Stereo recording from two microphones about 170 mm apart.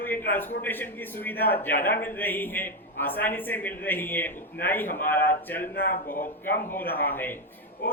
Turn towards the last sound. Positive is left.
turn(degrees=10)  # may be behind; listen again after turning